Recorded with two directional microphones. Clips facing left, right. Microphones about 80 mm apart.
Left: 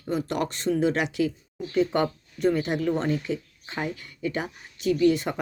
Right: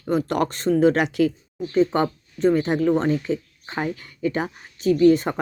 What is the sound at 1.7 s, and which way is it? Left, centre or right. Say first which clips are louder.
Speech: right 4 dB; right.